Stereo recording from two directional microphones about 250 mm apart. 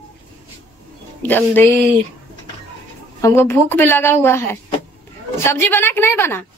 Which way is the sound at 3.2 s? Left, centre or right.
Centre.